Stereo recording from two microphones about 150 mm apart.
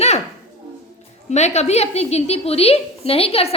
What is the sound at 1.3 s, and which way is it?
A woman's voice, 50° left (ahead or behind).